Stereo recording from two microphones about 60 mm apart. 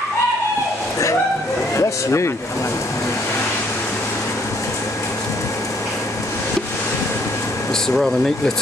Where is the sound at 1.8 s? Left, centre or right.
Left.